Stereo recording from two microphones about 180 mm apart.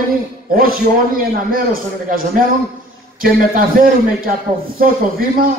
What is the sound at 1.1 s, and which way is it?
A man's voice, 50° right (ahead or behind).